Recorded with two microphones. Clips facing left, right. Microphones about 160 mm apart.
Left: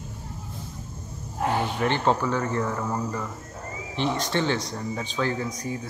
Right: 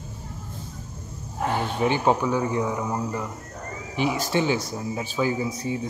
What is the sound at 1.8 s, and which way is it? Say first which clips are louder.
Speech: right 4 dB; 10° right (ahead or behind).